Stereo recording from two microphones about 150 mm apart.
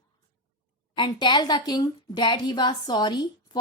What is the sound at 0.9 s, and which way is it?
A woman's voice, 30° left (ahead or behind).